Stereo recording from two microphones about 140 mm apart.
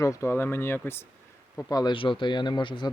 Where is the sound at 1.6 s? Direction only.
30° left (ahead or behind).